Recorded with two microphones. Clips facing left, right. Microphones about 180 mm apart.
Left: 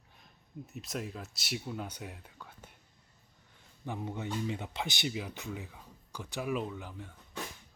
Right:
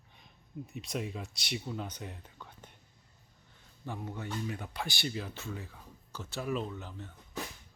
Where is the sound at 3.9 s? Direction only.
20° left (ahead or behind).